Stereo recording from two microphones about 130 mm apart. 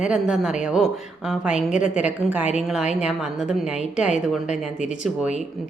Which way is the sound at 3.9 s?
65° left (ahead or behind).